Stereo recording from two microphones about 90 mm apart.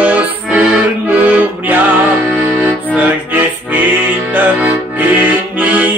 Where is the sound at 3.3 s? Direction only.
20° right (ahead or behind).